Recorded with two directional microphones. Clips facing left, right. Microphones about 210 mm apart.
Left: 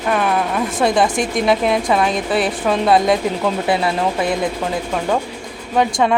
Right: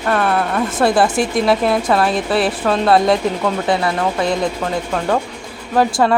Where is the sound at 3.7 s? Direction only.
20° left (ahead or behind).